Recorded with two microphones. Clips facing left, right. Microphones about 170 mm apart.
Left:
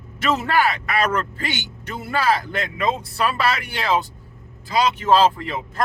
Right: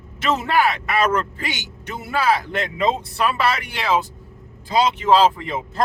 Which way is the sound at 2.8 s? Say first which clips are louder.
Right 2 dB; 25° right (ahead or behind).